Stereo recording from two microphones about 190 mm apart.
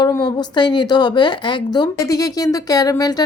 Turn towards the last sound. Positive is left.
turn(degrees=20)  # may be behind; listen again after turning